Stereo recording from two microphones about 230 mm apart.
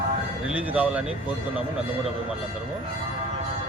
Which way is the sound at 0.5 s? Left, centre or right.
Centre.